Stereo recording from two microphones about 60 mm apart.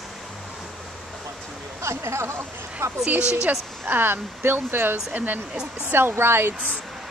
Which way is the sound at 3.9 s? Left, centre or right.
Right.